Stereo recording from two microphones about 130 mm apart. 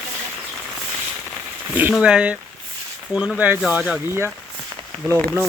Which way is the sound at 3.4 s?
15° right (ahead or behind).